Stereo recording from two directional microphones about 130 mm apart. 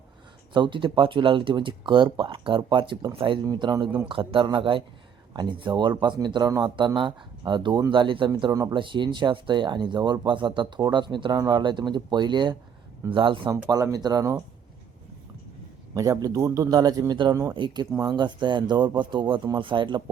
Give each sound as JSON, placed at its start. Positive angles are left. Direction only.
{"t": 0.5, "sound": "speech", "side_deg": -40}
{"t": 3.4, "sound": "speech", "side_deg": -30}
{"t": 13.5, "sound": "a man's voice", "side_deg": -25}
{"t": 16.0, "sound": "a man's voice", "side_deg": -25}